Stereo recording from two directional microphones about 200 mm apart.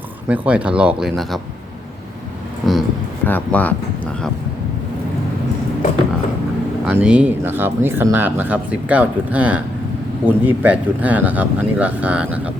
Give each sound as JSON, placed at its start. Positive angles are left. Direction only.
{"t": 0.3, "sound": "speech", "side_deg": -5}
{"t": 2.6, "sound": "speech", "side_deg": 0}
{"t": 6.8, "sound": "speech", "side_deg": -5}